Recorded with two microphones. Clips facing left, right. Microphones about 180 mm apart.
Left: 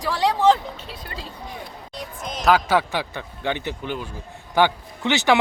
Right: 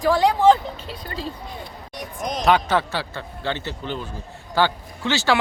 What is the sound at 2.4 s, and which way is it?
A man's voice, 5° left (ahead or behind).